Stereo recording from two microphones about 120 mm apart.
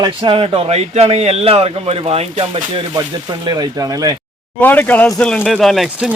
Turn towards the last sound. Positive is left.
turn(degrees=0)  # may be behind; listen again after turning